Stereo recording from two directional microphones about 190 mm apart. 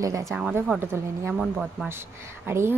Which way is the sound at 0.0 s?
15° right (ahead or behind).